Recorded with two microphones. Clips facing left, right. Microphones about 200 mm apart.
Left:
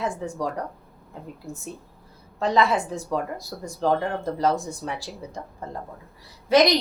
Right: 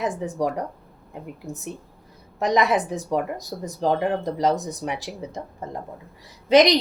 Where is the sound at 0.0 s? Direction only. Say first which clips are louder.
Right 3 dB; 20° right (ahead or behind).